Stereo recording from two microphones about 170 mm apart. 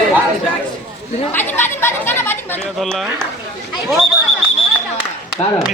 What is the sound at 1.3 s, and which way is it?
Chatter, 15° left (ahead or behind).